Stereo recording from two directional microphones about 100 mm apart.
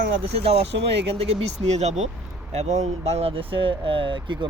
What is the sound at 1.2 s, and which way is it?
Speech, 90° right.